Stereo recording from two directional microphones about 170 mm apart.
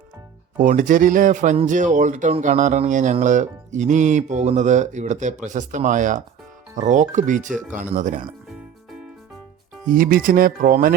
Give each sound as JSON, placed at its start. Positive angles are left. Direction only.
{"t": 0.6, "sound": "speech", "side_deg": -50}
{"t": 9.9, "sound": "speech", "side_deg": -55}